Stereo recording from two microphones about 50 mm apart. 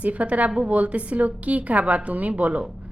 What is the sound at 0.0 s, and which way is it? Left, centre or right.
A woman's voice, right.